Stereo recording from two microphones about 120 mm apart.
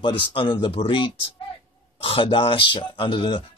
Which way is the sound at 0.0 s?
40° left (ahead or behind).